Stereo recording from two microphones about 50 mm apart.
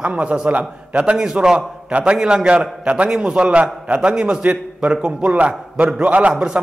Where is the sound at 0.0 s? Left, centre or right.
Right.